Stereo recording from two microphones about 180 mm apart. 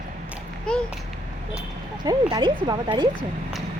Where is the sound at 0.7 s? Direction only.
5° left (ahead or behind).